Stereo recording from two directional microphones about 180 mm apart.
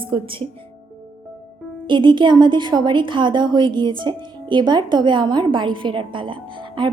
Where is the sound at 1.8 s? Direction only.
25° right (ahead or behind).